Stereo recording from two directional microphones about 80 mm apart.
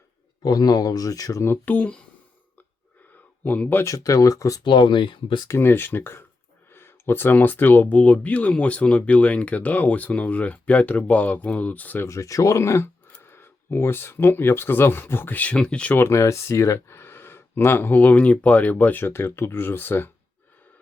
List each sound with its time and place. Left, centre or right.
0.4 s speech: left
1.4 s speech: left
3.4 s speech: left
3.8 s speech: left
4.6 s speech: left
5.5 s speech: left
12.0 s speech: left; by 16.0 s centre
16.0 s speech: left